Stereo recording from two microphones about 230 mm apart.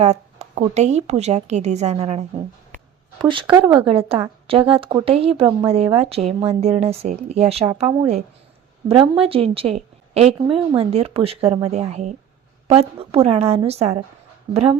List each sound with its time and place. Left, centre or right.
0.0 s a woman's voice: right
3.2 s a woman's voice: right